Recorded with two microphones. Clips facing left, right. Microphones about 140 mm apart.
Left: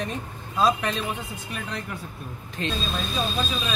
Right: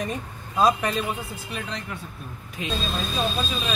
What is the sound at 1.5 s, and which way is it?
Speech, 5° left (ahead or behind).